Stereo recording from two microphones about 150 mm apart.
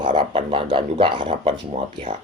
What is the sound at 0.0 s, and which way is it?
Speech, 35° right (ahead or behind).